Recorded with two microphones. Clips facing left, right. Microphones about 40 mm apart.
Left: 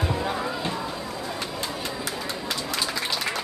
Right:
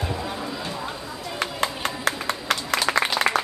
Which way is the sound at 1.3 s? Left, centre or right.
Right.